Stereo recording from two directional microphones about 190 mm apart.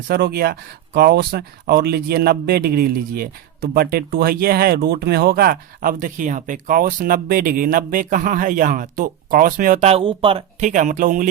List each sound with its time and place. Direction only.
0.1 s speech: 55° right (ahead or behind)
9.9 s speech: 30° right (ahead or behind)
10.7 s speech: 40° right (ahead or behind)